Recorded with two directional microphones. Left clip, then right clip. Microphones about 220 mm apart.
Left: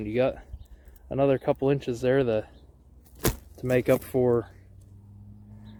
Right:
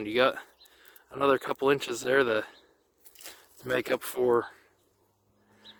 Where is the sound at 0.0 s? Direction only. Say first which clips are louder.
Right 1 dB; 30° right (ahead or behind).